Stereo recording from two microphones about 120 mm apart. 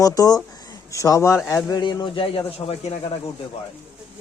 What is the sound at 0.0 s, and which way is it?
A man's voice, 30° left (ahead or behind).